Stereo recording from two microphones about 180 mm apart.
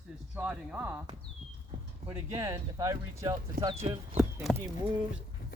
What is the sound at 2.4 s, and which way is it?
Speech, 20° right (ahead or behind).